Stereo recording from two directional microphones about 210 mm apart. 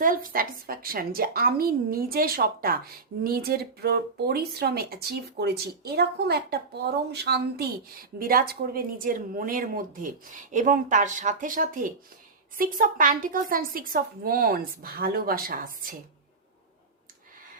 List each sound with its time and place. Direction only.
0.0 s a woman's voice: 40° right (ahead or behind)